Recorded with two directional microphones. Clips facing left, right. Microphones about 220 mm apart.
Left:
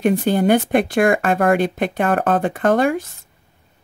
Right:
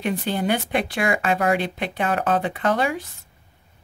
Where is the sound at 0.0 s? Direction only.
50° left (ahead or behind).